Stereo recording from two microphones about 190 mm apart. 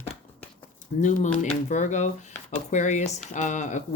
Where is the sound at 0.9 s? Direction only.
45° left (ahead or behind).